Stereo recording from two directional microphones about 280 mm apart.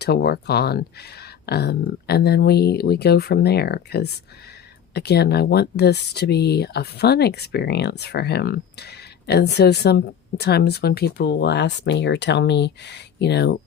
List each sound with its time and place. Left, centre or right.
0.0 s speech: left